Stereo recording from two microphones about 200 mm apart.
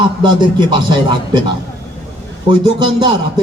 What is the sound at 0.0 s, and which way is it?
A man's voice, 25° right (ahead or behind).